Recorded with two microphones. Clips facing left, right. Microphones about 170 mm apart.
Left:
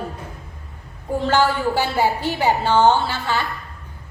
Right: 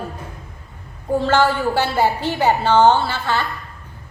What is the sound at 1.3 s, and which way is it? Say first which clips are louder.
A woman's voice: even; 10° left (ahead or behind).